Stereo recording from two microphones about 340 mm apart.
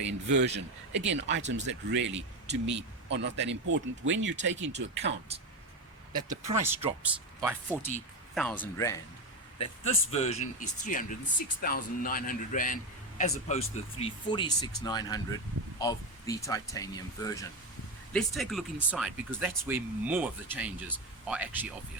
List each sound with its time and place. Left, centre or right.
0.0 s a man's voice: right
0.4 s speech: right
6.4 s speech: centre
7.7 s speech: centre
9.6 s speech: centre